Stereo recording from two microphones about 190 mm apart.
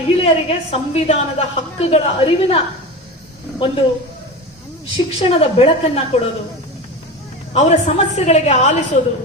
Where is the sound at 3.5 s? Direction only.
25° left (ahead or behind).